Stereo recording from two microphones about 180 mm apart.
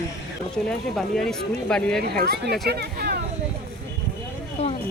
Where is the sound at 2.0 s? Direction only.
60° right (ahead or behind).